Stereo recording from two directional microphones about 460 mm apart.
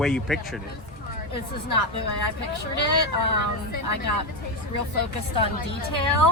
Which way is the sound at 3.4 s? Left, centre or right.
Right.